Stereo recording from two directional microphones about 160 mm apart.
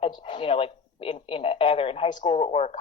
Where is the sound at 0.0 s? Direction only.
35° left (ahead or behind).